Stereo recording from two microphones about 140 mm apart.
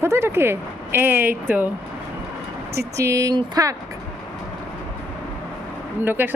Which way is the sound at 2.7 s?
20° right (ahead or behind).